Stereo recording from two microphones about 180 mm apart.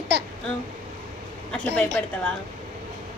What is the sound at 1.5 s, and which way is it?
Speech, 5° left (ahead or behind).